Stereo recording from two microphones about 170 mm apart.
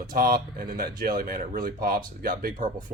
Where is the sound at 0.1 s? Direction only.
60° right (ahead or behind).